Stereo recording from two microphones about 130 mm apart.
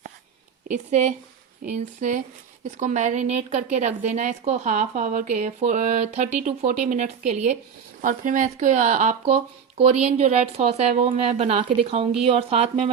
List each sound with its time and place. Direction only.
0.7 s a woman's voice: 65° right (ahead or behind)
8.0 s speech: 80° right; by 12.9 s 50° right (ahead or behind)